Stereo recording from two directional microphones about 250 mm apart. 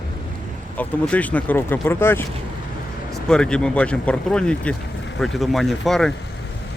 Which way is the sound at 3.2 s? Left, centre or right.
Centre.